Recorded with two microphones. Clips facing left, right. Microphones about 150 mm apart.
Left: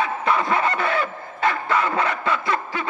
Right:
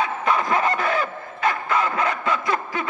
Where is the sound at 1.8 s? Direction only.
30° left (ahead or behind).